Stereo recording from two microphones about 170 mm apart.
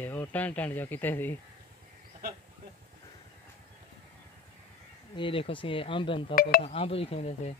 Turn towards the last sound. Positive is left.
turn(degrees=35)  # may be behind; listen again after turning